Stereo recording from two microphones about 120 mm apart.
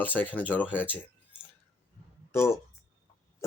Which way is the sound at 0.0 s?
15° left (ahead or behind).